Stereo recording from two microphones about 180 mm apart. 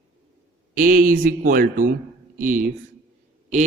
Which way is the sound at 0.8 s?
50° right (ahead or behind).